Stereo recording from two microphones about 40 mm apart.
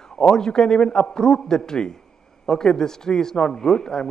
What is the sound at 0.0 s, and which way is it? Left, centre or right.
A man's voice, centre.